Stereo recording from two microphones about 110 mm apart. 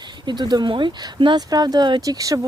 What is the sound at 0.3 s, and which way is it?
Speech, 40° right (ahead or behind).